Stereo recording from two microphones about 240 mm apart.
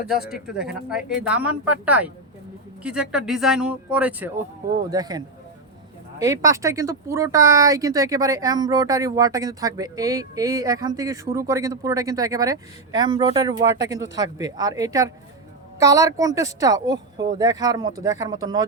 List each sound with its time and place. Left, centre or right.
0.3 s speech: centre
4.9 s speech: centre